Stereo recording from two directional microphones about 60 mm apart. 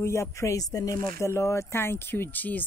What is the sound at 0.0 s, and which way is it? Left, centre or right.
Speech, left.